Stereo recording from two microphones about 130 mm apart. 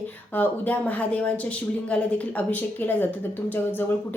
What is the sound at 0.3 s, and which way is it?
A woman's voice, 10° left (ahead or behind).